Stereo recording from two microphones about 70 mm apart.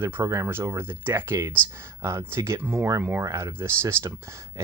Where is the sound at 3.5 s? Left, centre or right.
Right.